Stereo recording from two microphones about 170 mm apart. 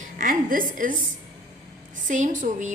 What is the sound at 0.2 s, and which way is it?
Speech, 55° right (ahead or behind).